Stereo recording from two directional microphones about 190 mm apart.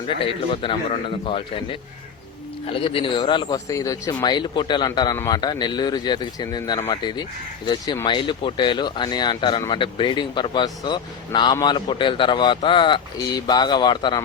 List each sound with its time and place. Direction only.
0.4 s speech: 25° left (ahead or behind)
2.6 s speech: 30° left (ahead or behind)